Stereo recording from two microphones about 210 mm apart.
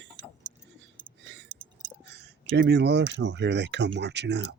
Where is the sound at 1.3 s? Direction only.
55° right (ahead or behind).